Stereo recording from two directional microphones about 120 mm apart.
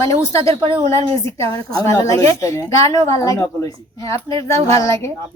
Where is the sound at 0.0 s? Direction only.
25° left (ahead or behind).